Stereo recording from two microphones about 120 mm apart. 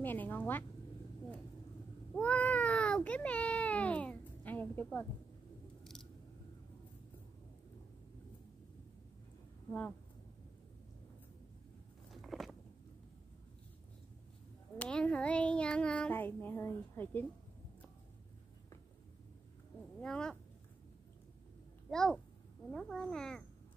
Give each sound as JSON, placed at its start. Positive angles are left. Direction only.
{"t": 0.0, "sound": "speech", "side_deg": 15}
{"t": 2.1, "sound": "baby cry", "side_deg": 10}
{"t": 9.7, "sound": "speech", "side_deg": 15}
{"t": 12.1, "sound": "biting", "side_deg": 0}
{"t": 14.8, "sound": "child singing", "side_deg": 10}
{"t": 20.0, "sound": "speech", "side_deg": 5}
{"t": 21.9, "sound": "a child's voice", "side_deg": 5}